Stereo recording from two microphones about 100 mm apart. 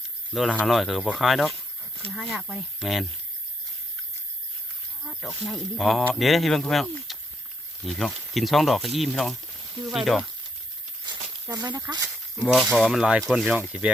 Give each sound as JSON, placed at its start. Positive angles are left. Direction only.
{"t": 0.6, "sound": "speech", "side_deg": 0}
{"t": 5.0, "sound": "speech", "side_deg": 0}
{"t": 11.0, "sound": "snake", "side_deg": -45}
{"t": 12.5, "sound": "speech", "side_deg": 0}